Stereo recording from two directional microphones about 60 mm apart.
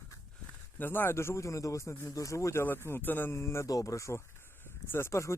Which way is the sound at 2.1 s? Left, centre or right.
Left.